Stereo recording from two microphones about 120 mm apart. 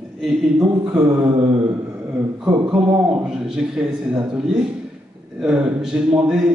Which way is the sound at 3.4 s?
5° right (ahead or behind).